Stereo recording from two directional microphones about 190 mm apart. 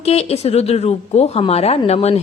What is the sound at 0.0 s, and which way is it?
A woman's voice, 35° left (ahead or behind).